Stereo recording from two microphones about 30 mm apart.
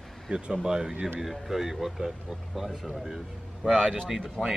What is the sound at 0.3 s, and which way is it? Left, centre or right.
Speech, right.